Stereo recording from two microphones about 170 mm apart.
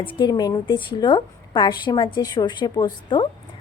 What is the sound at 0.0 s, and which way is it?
A woman's voice, 25° left (ahead or behind).